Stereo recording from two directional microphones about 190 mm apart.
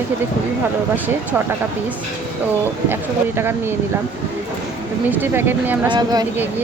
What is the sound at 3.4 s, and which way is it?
Speech, 10° right (ahead or behind).